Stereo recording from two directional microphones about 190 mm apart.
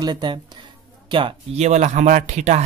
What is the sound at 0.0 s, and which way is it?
Speech, 25° right (ahead or behind).